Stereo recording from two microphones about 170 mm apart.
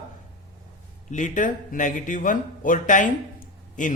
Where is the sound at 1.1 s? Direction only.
50° left (ahead or behind).